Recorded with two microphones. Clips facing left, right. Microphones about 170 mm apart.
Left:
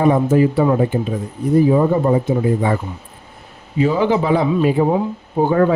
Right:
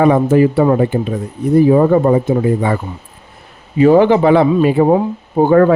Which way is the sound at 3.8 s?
60° right (ahead or behind).